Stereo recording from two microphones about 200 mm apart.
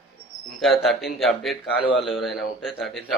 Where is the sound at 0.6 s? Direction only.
Centre (ahead or behind).